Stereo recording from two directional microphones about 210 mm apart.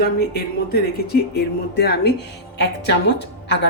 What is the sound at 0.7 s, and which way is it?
A woman's voice, 50° left (ahead or behind).